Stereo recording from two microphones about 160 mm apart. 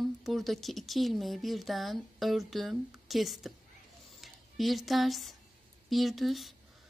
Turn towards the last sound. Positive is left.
turn(degrees=0)  # may be behind; listen again after turning